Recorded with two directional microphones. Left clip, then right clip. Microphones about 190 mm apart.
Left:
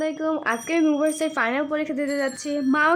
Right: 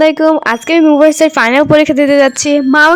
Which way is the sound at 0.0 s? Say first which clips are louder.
Right 16 dB; 55° right (ahead or behind).